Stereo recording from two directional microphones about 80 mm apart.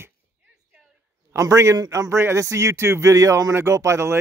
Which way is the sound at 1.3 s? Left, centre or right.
Right.